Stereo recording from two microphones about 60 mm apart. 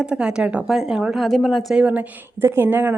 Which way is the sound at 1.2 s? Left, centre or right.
Centre.